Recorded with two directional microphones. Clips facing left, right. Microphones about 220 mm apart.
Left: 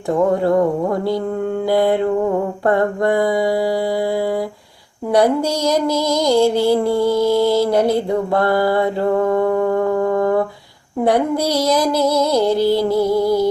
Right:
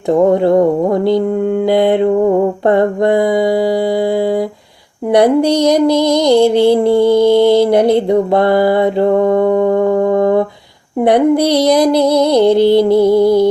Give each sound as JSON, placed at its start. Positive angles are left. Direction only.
{"t": 0.1, "sound": "music", "side_deg": -20}
{"t": 2.6, "sound": "mantra", "side_deg": -20}
{"t": 5.1, "sound": "music", "side_deg": -20}